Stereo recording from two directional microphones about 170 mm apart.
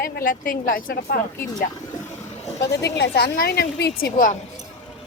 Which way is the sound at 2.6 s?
15° left (ahead or behind).